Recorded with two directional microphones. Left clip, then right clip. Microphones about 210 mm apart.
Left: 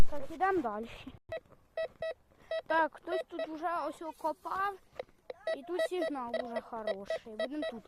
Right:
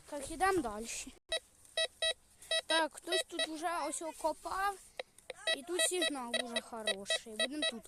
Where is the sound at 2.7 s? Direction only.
5° right (ahead or behind).